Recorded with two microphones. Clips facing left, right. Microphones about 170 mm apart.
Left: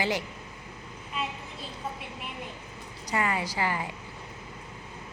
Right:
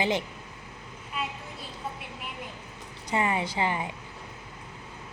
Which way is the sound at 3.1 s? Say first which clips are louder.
Right 2 dB; 20° right (ahead or behind).